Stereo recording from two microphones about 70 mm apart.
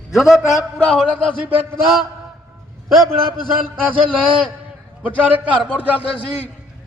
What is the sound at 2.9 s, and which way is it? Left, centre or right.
Speech, centre.